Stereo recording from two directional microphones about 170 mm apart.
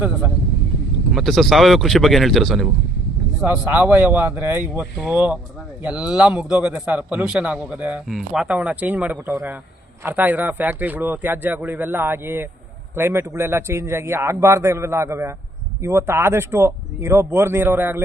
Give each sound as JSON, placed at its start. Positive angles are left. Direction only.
{"t": 1.1, "sound": "speech", "side_deg": 0}
{"t": 3.4, "sound": "a man's voice", "side_deg": -10}